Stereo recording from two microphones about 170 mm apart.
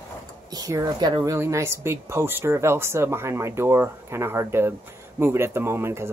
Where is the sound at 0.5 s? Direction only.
20° right (ahead or behind).